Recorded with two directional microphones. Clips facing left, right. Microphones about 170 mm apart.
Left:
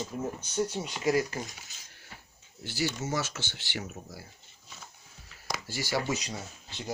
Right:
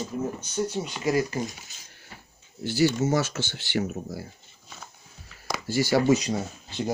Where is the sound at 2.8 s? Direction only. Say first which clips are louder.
Right 9 dB; 55° right (ahead or behind).